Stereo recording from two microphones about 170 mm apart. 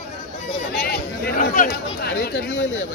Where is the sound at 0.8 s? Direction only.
70° left (ahead or behind); by 1.7 s 50° left (ahead or behind).